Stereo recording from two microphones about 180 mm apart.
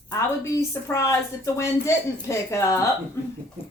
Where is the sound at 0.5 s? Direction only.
15° left (ahead or behind).